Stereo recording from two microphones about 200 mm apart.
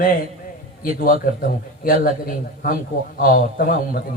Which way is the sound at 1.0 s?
45° left (ahead or behind).